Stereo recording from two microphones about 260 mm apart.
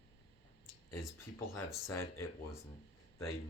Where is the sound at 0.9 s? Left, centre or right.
Centre.